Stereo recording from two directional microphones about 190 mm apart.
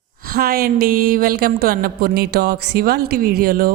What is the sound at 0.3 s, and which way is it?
A woman's voice, 55° right (ahead or behind).